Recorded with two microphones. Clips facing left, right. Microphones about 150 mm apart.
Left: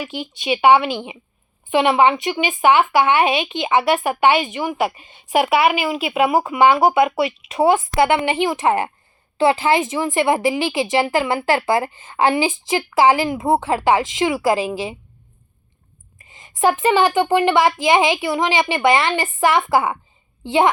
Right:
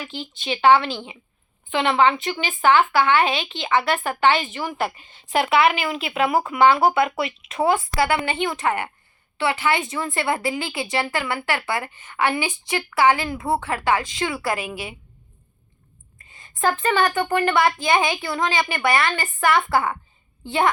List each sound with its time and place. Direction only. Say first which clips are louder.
0.0 s a woman's voice: left 5 dB; 15° left (ahead or behind); by 14.9 s 30° left (ahead or behind)
16.1 s a sound: left 4 dB; 20° left (ahead or behind)
16.6 s a woman's voice: left 5 dB; 20° left (ahead or behind)